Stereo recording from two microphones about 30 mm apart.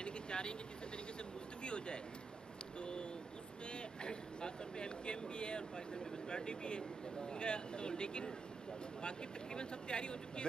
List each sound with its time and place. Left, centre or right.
0.0 s vehicle: left
1.6 s speech: left
2.8 s a sound: left
3.7 s speech: left